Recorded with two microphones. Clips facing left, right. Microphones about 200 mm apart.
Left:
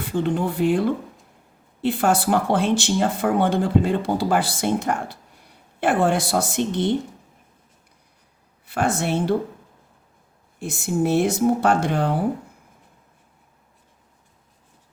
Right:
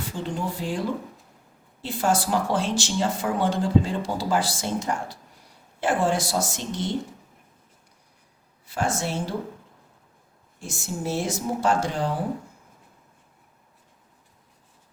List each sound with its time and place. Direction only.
0.1 s speech: 60° left (ahead or behind)
8.6 s speech: 60° left (ahead or behind)
10.6 s speech: 60° left (ahead or behind)